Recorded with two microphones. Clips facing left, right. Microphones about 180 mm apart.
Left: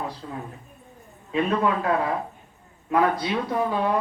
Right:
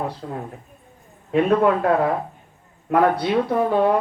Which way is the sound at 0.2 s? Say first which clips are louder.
Right 4 dB; 50° right (ahead or behind).